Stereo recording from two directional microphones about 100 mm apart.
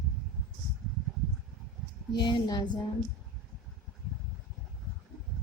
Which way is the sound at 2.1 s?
50° left (ahead or behind).